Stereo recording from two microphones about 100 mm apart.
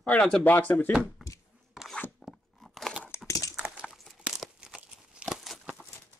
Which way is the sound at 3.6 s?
5° right (ahead or behind).